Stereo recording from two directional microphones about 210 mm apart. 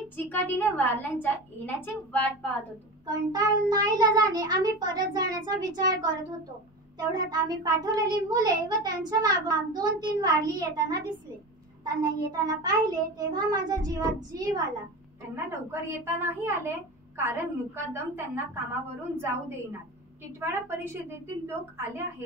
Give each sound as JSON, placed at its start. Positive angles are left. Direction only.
{"t": 0.1, "sound": "a woman's voice", "side_deg": 10}
{"t": 3.1, "sound": "a child's voice", "side_deg": -20}